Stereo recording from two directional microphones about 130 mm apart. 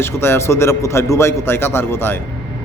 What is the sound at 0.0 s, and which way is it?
A man's voice, 20° left (ahead or behind).